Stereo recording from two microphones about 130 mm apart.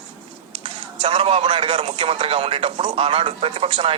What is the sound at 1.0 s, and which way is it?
A man's voice, 45° right (ahead or behind).